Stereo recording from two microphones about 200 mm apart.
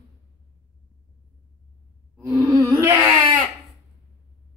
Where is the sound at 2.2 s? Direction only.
15° right (ahead or behind).